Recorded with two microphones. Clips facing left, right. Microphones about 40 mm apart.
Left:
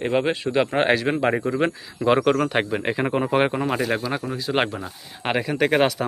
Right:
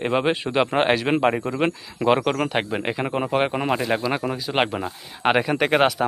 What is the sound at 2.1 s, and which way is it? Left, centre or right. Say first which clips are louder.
Speech: left 1 dB; centre.